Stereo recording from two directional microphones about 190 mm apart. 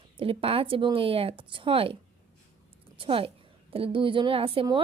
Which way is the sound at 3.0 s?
30° right (ahead or behind).